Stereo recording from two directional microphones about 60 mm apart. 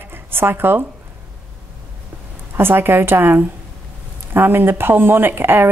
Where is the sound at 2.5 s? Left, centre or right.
Right.